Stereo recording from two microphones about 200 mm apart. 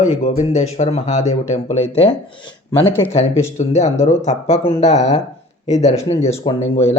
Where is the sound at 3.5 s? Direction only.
35° left (ahead or behind).